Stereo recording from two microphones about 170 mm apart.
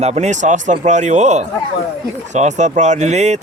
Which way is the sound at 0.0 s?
40° right (ahead or behind).